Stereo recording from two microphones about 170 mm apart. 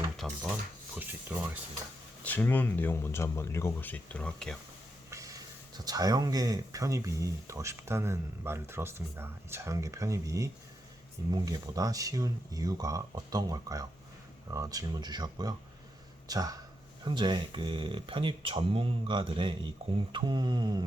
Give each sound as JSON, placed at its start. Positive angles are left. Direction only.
{"t": 0.2, "sound": "speech", "side_deg": 0}
{"t": 0.9, "sound": "speech", "side_deg": -10}
{"t": 2.2, "sound": "speech", "side_deg": 10}
{"t": 5.1, "sound": "speech", "side_deg": -20}